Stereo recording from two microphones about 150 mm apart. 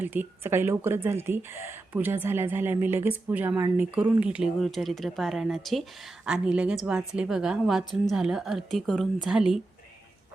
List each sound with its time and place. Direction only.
0.0 s a woman's voice: 10° right (ahead or behind)